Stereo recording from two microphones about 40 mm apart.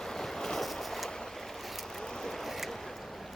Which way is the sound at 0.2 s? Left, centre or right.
Centre.